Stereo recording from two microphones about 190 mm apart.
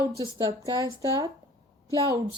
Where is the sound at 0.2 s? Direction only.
15° right (ahead or behind).